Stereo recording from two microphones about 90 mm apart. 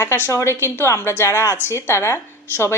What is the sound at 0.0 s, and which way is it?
A woman's voice, 30° left (ahead or behind).